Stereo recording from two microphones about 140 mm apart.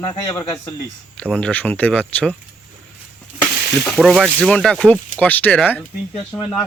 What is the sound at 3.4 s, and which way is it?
Frying, 5° left (ahead or behind).